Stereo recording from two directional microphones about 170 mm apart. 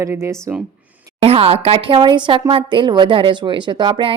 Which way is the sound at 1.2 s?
35° right (ahead or behind).